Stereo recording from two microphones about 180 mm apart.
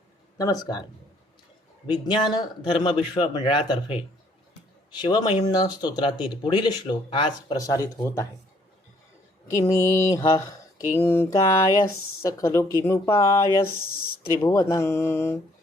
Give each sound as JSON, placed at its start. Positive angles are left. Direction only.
{"t": 1.9, "sound": "speech", "side_deg": 25}
{"t": 9.5, "sound": "speech", "side_deg": 20}